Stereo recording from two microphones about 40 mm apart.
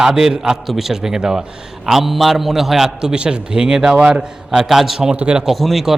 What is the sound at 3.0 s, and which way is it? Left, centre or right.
Speech, right.